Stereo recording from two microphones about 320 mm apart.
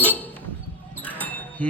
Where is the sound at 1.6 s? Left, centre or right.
Centre.